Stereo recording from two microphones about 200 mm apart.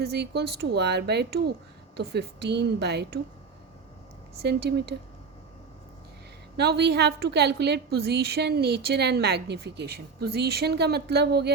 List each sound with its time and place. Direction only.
0.0 s speech: 55° right (ahead or behind)
4.4 s speech: 55° right (ahead or behind)
6.6 s a woman's voice: 55° right (ahead or behind)